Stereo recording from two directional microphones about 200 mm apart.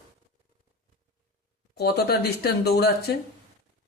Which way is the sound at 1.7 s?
55° left (ahead or behind).